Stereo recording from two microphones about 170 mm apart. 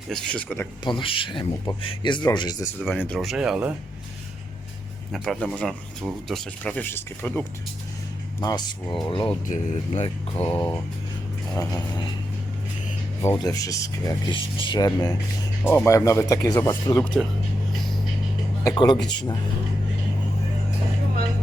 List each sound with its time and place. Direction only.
0.1 s speech: 5° left (ahead or behind)
0.9 s speech: 30° left (ahead or behind)
2.8 s speech: centre (ahead or behind)
5.1 s speech: centre (ahead or behind)
8.4 s speech: 25° left (ahead or behind)
9.5 s speech: 40° left (ahead or behind)
10.6 s speech: 15° left (ahead or behind)
13.2 s speech: 20° left (ahead or behind)
18.6 s speech: 25° left (ahead or behind)